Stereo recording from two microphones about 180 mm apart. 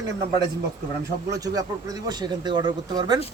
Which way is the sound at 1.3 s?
20° right (ahead or behind).